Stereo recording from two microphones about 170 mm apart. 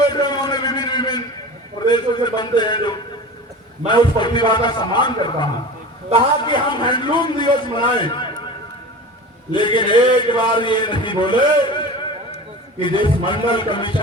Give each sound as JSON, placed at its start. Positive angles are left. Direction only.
{"t": 0.0, "sound": "a sound", "side_deg": 25}
{"t": 3.8, "sound": "a man's voice", "side_deg": 25}
{"t": 9.5, "sound": "a man's voice", "side_deg": 25}